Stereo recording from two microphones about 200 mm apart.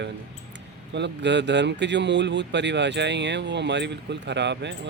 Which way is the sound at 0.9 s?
60° right (ahead or behind).